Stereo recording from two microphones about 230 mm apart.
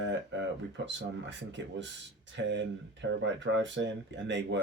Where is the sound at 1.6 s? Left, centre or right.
Right.